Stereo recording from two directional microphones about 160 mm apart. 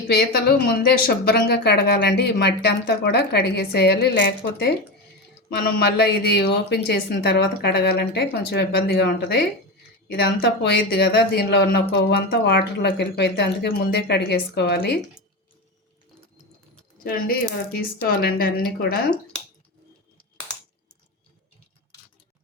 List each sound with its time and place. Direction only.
0.1 s speech: 85° left
5.8 s speech: 90° left
17.0 s a woman's voice: 65° left (ahead or behind)